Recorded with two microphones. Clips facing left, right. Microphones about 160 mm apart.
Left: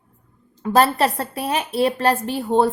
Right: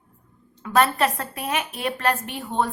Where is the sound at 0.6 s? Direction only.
35° left (ahead or behind).